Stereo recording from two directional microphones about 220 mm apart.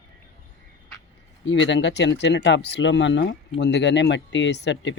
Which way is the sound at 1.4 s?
55° left (ahead or behind).